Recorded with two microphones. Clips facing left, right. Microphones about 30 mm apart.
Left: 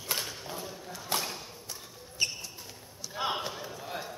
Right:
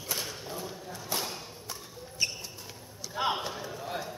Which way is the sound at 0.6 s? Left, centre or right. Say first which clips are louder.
Right 1 dB; centre.